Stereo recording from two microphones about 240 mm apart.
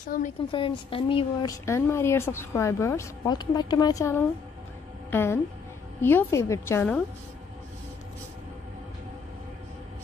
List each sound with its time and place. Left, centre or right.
0.0 s a woman's voice: left
0.5 s speech: left